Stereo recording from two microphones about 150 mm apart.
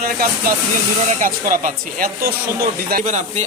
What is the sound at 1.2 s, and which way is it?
Speech, 65° right (ahead or behind).